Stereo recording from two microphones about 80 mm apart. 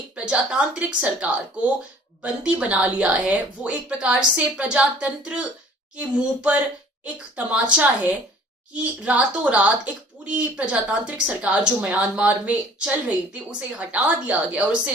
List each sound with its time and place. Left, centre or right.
0.3 s a woman's voice: centre